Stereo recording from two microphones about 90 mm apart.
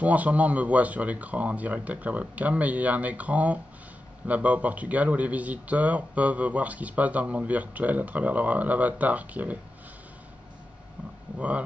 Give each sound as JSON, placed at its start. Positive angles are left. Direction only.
{"t": 0.0, "sound": "a man's voice", "side_deg": -15}
{"t": 11.3, "sound": "a man's voice", "side_deg": -15}